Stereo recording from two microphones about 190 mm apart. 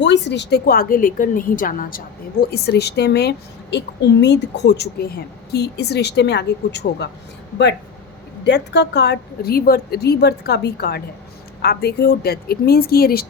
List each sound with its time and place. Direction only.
0.0 s a woman's voice: 65° left (ahead or behind)
8.4 s a woman's voice: 65° left (ahead or behind)